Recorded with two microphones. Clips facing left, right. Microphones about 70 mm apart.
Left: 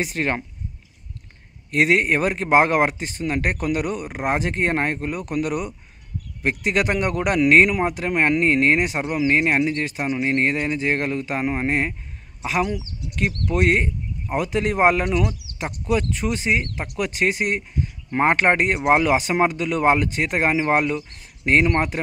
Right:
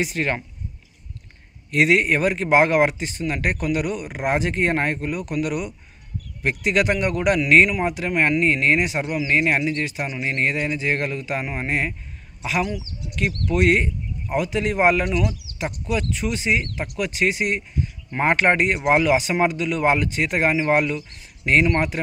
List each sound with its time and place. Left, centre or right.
0.0 s speech: left
1.7 s speech: left
13.5 s speech: left